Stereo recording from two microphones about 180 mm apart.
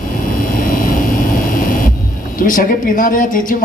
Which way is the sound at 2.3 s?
50° left (ahead or behind).